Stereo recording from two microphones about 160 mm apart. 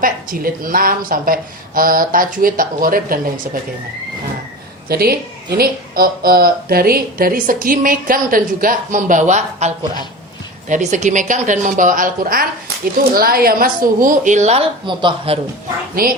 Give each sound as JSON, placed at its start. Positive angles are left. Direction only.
{"t": 0.0, "sound": "a woman's voice", "side_deg": -60}
{"t": 4.9, "sound": "a woman's voice", "side_deg": -70}
{"t": 14.8, "sound": "a man's voice", "side_deg": -30}
{"t": 16.0, "sound": "a woman's voice", "side_deg": -65}